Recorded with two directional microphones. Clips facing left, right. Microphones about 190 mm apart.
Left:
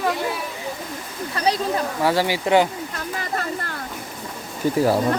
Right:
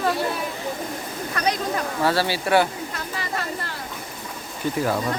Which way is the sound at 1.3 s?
30° left (ahead or behind).